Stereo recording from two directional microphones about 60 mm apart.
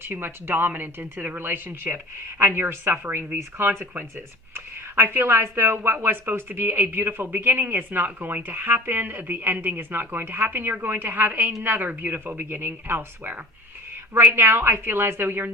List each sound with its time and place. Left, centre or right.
0.0 s a woman's voice: right
5.2 s a woman's voice: right